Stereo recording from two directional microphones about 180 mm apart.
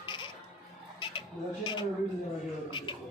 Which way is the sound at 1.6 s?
25° left (ahead or behind).